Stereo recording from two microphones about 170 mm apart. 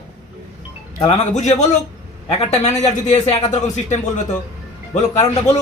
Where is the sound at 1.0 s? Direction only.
40° left (ahead or behind).